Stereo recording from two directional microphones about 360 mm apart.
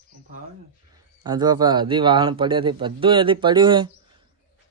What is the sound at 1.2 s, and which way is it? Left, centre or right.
Speech, centre.